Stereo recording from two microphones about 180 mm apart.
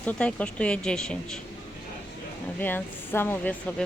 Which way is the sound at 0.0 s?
5° left (ahead or behind).